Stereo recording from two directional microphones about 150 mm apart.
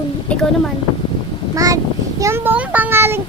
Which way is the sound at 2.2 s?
15° right (ahead or behind).